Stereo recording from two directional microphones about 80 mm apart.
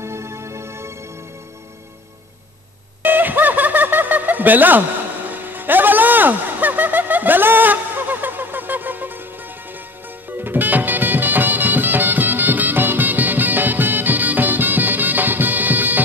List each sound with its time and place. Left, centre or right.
0.0 s music: right
3.0 s a sound: right
10.3 s music: right